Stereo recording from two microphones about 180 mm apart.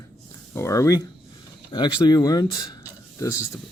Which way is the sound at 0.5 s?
15° left (ahead or behind).